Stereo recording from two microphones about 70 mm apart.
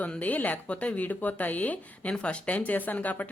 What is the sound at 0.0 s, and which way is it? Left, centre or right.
Speech, left.